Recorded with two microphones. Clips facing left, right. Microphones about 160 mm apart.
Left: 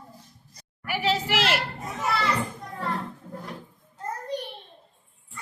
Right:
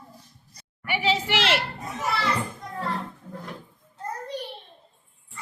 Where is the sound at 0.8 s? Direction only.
Centre (ahead or behind).